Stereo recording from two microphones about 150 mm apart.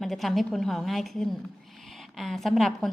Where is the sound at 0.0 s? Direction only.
Centre (ahead or behind).